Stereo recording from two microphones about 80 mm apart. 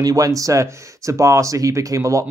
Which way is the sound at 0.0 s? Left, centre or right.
Right.